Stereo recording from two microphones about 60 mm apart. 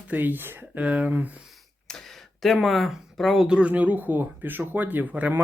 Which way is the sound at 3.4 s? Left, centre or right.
Centre.